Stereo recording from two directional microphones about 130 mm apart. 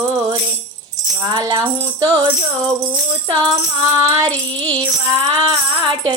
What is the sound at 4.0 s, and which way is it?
Music, 25° right (ahead or behind).